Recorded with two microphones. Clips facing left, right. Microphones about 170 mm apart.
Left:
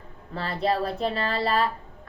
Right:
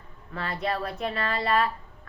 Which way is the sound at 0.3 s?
30° left (ahead or behind).